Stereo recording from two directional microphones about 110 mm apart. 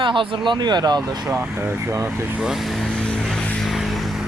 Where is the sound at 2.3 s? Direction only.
5° right (ahead or behind).